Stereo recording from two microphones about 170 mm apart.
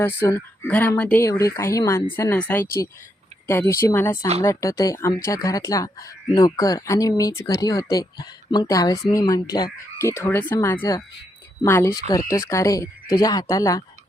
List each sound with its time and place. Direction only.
0.0 s speech: 15° left (ahead or behind)